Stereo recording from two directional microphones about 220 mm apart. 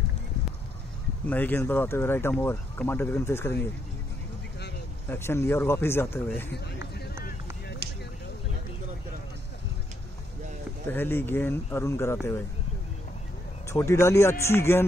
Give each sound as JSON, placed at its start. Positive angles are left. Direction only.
{"t": 1.2, "sound": "speech", "side_deg": 5}
{"t": 5.0, "sound": "speech", "side_deg": 10}
{"t": 7.8, "sound": "a sound", "side_deg": -50}
{"t": 10.9, "sound": "speech", "side_deg": 10}
{"t": 13.7, "sound": "speech", "side_deg": 10}